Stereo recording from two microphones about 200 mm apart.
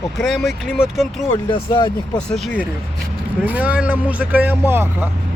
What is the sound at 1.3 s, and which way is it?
Speech, 25° left (ahead or behind).